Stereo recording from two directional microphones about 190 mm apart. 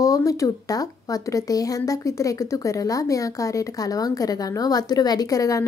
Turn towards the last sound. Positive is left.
turn(degrees=15)  # may be behind; listen again after turning